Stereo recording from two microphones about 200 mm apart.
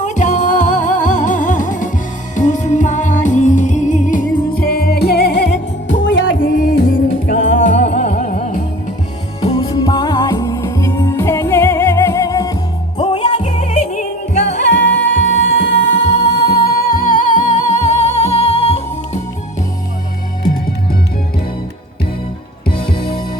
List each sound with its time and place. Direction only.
0.0 s music: 35° left (ahead or behind); by 6.0 s 55° left (ahead or behind)
6.1 s music: 70° left (ahead or behind)
7.3 s music: 35° left (ahead or behind)
9.4 s music: 25° left (ahead or behind)
13.0 s music: 30° left (ahead or behind)
14.8 s music: 65° left (ahead or behind)
16.3 s music: 50° left (ahead or behind); by 19.2 s 30° left (ahead or behind)